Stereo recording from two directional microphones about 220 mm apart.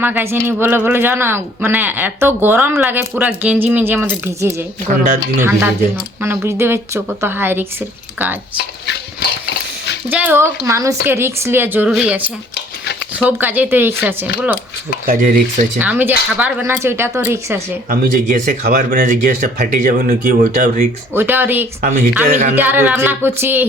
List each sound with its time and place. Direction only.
0.0 s speech: 10° right (ahead or behind)
10.1 s speech: 5° right (ahead or behind)
13.2 s speech: 10° right (ahead or behind)
15.0 s speech: 35° right (ahead or behind)
15.8 s speech: 10° right (ahead or behind)
17.8 s speech: 35° right (ahead or behind)
21.1 s speech: 10° right (ahead or behind)
21.8 s speech: 40° right (ahead or behind)
22.5 s speech: 10° right (ahead or behind)